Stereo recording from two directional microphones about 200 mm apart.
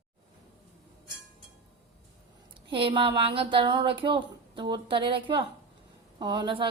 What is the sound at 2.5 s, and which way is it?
Speech, 25° right (ahead or behind).